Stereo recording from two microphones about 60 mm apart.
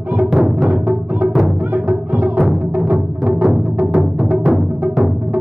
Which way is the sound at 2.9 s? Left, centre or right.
Centre.